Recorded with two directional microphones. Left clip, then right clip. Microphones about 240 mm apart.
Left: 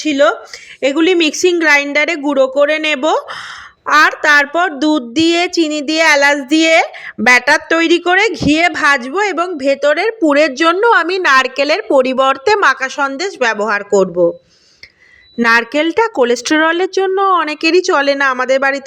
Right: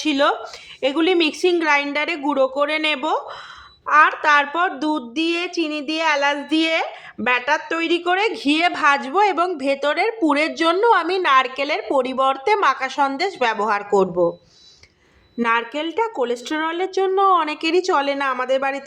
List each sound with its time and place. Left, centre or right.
0.0 s a woman's voice: centre
15.4 s a woman's voice: left